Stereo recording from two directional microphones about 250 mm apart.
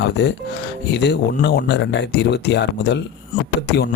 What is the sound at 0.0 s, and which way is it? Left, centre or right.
Speech, left.